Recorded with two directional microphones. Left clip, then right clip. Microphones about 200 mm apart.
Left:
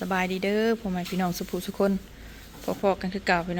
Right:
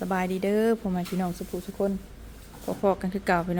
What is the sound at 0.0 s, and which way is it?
Speech, 10° right (ahead or behind).